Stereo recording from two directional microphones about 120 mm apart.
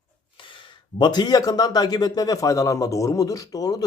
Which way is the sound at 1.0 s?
35° left (ahead or behind).